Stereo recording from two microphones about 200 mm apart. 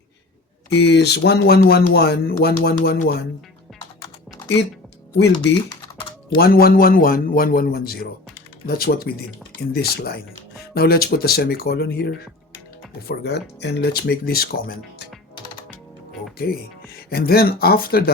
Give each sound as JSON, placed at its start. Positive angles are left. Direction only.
{"t": 0.7, "sound": "speech", "side_deg": 60}
{"t": 6.3, "sound": "speech", "side_deg": 50}
{"t": 12.5, "sound": "music", "side_deg": 55}
{"t": 13.6, "sound": "speech", "side_deg": 60}
{"t": 16.4, "sound": "speech", "side_deg": 50}